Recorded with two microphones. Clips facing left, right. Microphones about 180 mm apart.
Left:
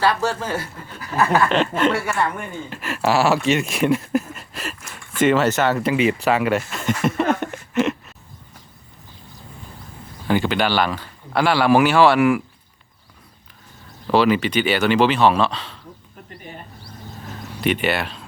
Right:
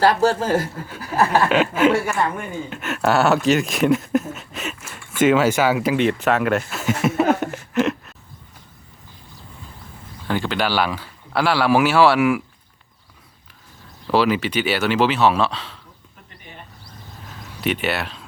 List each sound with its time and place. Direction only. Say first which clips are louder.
0.0 s speech: right 4 dB; 40° right (ahead or behind)
0.8 s speech: right 2 dB; 5° right (ahead or behind)
1.2 s speech: even; 30° right (ahead or behind)
1.5 s speech: right 2 dB; 5° right (ahead or behind)
2.1 s speech: right 1 dB; 15° right (ahead or behind)
2.6 s speech: even; centre (ahead or behind)
6.2 s a sound: even; centre (ahead or behind)
10.2 s speech: left 3 dB; 5° left (ahead or behind)
14.1 s speech: left 2 dB; 5° right (ahead or behind)
17.6 s speech: left 2 dB; centre (ahead or behind)